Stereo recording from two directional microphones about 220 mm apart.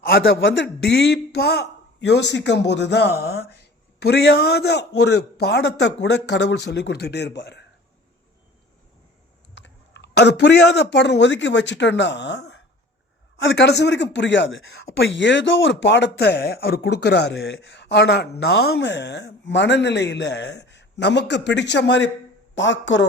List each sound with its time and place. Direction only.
0.0 s speech: 45° left (ahead or behind)
9.6 s speech: 55° left (ahead or behind)